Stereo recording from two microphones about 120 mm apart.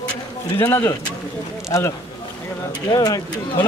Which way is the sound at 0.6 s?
25° left (ahead or behind).